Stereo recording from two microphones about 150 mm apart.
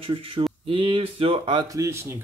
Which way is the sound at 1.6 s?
20° right (ahead or behind).